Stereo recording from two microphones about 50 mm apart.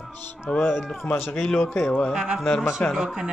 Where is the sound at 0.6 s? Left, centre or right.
Left.